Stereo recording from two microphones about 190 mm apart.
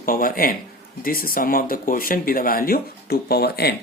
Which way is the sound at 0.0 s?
50° left (ahead or behind).